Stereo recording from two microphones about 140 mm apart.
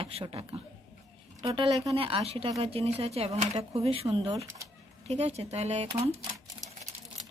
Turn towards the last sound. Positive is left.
turn(degrees=-50)  # may be behind; listen again after turning